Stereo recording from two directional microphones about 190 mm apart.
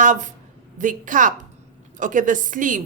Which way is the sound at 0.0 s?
40° right (ahead or behind).